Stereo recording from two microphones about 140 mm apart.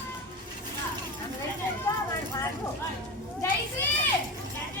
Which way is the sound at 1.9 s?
20° left (ahead or behind).